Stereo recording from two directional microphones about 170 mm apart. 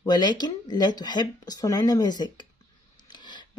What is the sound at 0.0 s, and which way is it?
Speech, 25° left (ahead or behind).